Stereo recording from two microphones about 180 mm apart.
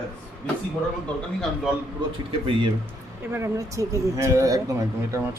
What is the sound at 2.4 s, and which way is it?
Speech, 30° right (ahead or behind).